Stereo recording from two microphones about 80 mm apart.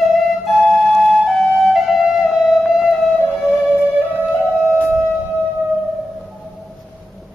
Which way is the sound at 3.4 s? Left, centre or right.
Left.